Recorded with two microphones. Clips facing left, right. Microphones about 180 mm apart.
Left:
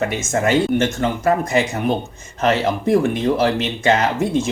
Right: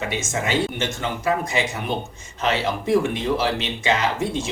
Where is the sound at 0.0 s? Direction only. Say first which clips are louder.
Left 6 dB; 50° left (ahead or behind).